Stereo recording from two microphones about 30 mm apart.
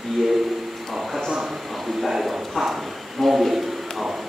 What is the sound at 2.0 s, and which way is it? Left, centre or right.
Speech, centre.